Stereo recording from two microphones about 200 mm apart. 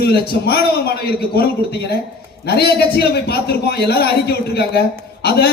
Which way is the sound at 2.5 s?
55° left (ahead or behind).